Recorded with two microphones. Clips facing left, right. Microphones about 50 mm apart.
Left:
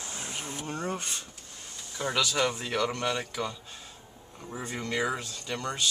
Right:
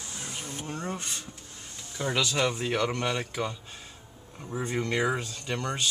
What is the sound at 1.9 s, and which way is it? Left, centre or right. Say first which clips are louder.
Speech: right 1 dB; centre.